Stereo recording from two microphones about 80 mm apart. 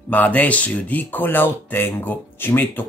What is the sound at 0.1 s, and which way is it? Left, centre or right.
Speech, centre.